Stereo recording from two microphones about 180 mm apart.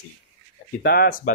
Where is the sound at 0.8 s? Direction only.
55° left (ahead or behind).